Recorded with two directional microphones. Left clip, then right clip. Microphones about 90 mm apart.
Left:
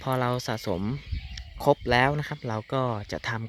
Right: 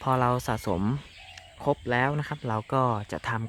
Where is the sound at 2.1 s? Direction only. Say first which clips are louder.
Even; 20° left (ahead or behind).